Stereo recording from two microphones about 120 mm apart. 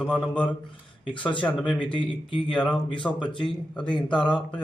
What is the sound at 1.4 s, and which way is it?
Speech, 10° left (ahead or behind).